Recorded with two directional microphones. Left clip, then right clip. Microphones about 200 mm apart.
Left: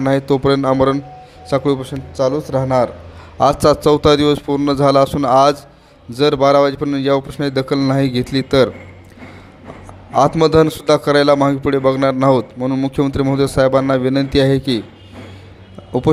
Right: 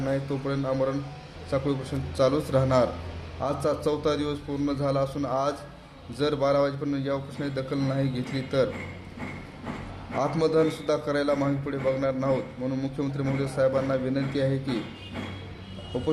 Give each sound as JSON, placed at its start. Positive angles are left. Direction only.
{"t": 0.0, "sound": "a man's voice", "side_deg": 50}
{"t": 2.1, "sound": "a man's voice", "side_deg": 25}
{"t": 3.4, "sound": "a man's voice", "side_deg": 50}
{"t": 10.2, "sound": "a man's voice", "side_deg": 45}
{"t": 16.1, "sound": "a man's voice", "side_deg": 50}